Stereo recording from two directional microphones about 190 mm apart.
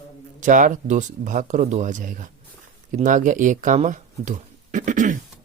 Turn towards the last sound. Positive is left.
turn(degrees=-45)  # may be behind; listen again after turning